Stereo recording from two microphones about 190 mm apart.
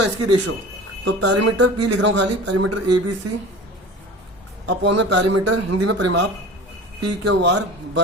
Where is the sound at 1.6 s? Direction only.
75° right (ahead or behind).